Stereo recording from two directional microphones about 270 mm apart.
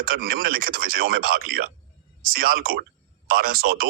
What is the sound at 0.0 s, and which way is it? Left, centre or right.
Speech, right.